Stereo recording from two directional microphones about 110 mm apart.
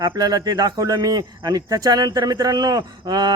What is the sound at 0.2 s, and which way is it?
Speech, 35° right (ahead or behind).